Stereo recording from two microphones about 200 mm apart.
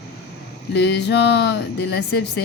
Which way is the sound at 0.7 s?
55° left (ahead or behind).